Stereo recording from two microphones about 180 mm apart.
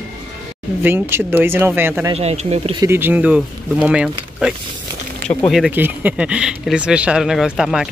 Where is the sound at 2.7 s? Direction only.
15° right (ahead or behind).